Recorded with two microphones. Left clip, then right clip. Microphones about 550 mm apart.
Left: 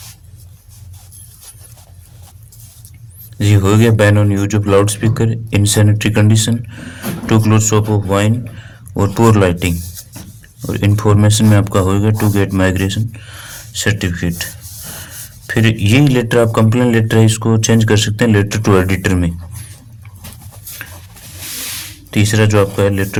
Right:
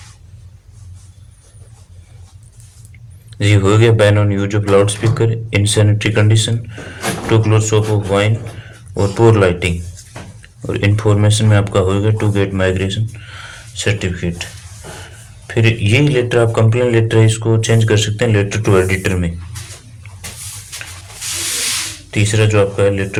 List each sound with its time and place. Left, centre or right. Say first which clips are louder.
3.3 s speech: right 1 dB; left
15.4 s speech: left 1 dB; left
22.1 s speech: left 2 dB; left